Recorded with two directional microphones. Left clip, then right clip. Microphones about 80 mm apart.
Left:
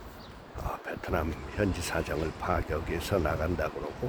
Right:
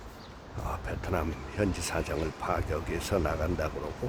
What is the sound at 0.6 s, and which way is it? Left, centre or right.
Speech, centre.